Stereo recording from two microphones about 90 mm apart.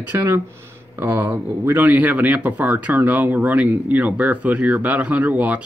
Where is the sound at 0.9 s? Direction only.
25° right (ahead or behind).